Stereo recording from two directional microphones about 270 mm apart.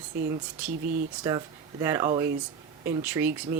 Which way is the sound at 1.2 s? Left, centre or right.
Centre.